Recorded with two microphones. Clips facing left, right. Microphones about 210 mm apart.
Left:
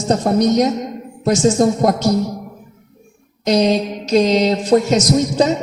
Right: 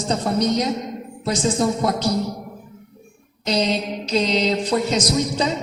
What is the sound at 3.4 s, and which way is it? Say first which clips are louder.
Speech: left 7 dB; 45° left (ahead or behind).